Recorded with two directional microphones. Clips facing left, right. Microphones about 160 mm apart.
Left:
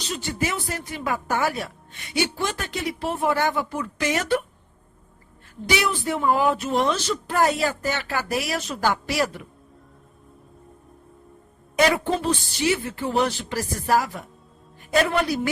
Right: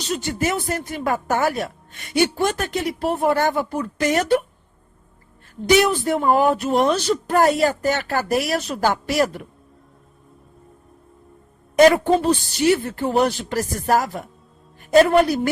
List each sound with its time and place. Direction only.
0.1 s a woman's voice: 45° right (ahead or behind)
5.6 s a woman's voice: 45° right (ahead or behind)
11.8 s a woman's voice: 40° right (ahead or behind)